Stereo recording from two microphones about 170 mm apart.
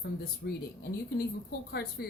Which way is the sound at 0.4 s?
90° left.